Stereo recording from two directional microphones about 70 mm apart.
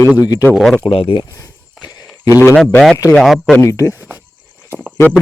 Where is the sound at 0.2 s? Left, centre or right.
Left.